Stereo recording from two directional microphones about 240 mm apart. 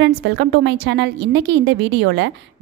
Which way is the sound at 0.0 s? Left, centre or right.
Right.